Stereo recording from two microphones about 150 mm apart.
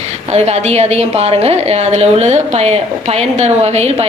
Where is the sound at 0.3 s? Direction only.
45° right (ahead or behind).